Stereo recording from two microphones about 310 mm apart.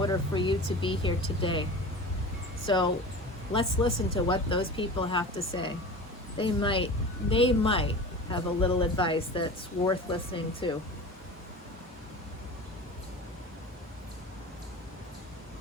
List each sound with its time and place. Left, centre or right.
0.0 s a man's voice: centre
2.6 s a man's voice: centre